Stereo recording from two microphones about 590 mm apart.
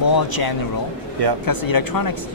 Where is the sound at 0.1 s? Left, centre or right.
Left.